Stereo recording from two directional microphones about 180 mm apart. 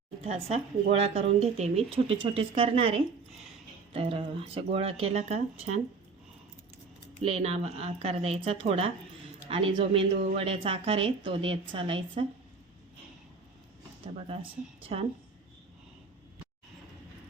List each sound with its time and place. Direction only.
0.3 s speech: 35° right (ahead or behind)
3.9 s speech: 30° right (ahead or behind)
7.2 s a woman's voice: 35° right (ahead or behind)
14.8 s a woman's voice: 30° right (ahead or behind)